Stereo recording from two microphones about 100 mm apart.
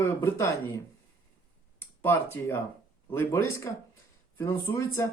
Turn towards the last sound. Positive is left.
turn(degrees=25)  # may be behind; listen again after turning